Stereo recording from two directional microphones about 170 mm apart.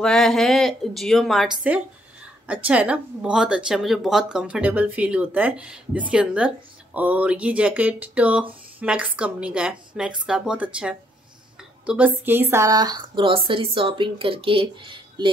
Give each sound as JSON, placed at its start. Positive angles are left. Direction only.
{"t": 0.0, "sound": "speech", "side_deg": 0}